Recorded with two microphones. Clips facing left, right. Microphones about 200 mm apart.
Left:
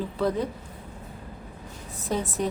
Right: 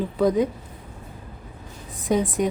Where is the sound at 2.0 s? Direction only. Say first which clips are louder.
Right 6 dB; 15° right (ahead or behind).